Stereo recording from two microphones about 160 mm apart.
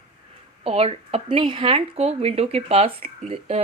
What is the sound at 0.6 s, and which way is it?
Speech, 40° right (ahead or behind).